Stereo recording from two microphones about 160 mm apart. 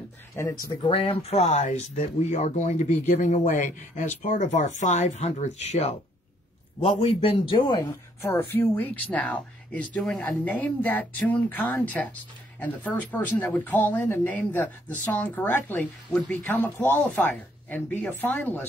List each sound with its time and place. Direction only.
0.3 s speech: 15° left (ahead or behind)
0.8 s a man's voice: 35° left (ahead or behind)
8.2 s speech: 15° left (ahead or behind)